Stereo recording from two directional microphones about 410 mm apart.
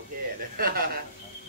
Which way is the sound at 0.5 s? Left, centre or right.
Right.